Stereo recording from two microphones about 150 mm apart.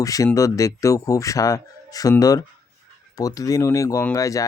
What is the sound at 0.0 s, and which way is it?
Speech, 20° left (ahead or behind).